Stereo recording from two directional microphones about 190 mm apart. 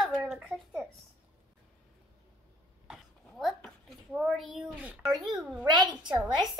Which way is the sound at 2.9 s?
Centre (ahead or behind).